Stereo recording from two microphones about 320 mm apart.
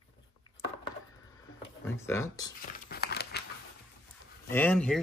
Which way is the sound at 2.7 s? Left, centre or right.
Left.